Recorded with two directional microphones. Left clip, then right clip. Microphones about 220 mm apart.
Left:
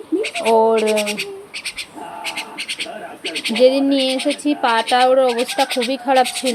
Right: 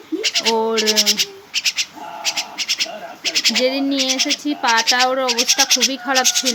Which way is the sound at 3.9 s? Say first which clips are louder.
Left 1 dB; 25° right (ahead or behind).